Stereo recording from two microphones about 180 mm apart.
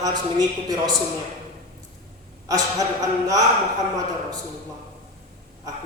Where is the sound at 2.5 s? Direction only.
20° right (ahead or behind).